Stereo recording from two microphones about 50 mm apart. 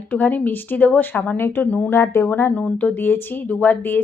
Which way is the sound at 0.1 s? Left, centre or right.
Left.